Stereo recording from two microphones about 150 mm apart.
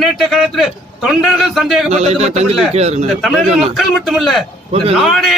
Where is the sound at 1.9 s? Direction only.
45° right (ahead or behind).